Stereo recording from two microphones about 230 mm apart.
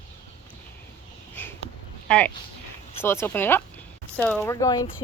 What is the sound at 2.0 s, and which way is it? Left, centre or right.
Speech, centre.